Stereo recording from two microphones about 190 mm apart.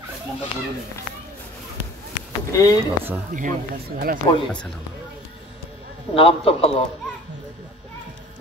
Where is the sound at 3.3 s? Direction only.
40° right (ahead or behind).